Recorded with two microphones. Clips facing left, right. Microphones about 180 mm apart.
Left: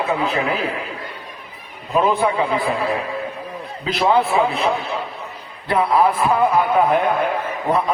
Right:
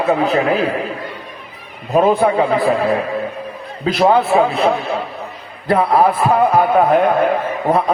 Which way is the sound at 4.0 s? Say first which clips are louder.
Right 4 dB; 45° right (ahead or behind).